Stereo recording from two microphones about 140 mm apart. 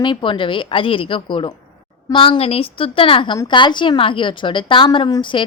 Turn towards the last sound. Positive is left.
turn(degrees=35)  # may be behind; listen again after turning